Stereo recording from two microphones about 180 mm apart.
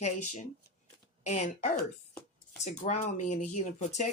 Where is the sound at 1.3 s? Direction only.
40° left (ahead or behind).